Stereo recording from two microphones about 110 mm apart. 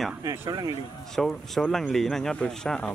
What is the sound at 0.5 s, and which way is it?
Speech, 40° right (ahead or behind).